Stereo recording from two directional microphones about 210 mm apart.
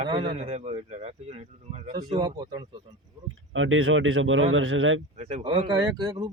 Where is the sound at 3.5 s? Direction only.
70° right (ahead or behind).